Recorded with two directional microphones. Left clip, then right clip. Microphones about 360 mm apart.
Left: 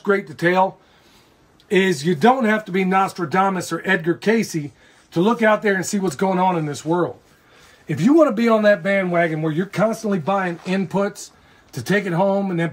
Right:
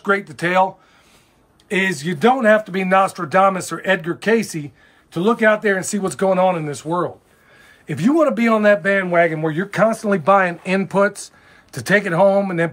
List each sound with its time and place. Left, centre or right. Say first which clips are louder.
0.0 s speech: even; centre
1.7 s speech: left 2 dB; centre
10.0 s speech: right 7 dB; centre
10.7 s speech: right 4 dB; centre